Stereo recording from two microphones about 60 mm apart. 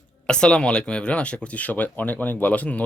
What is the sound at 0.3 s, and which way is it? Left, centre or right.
Speech, centre.